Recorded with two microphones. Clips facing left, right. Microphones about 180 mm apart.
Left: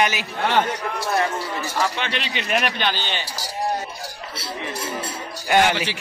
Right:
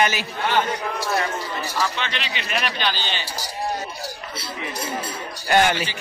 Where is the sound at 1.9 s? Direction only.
50° left (ahead or behind).